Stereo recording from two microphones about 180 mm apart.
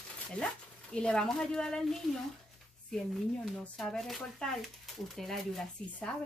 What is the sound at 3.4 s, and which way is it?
A woman's voice, centre (ahead or behind).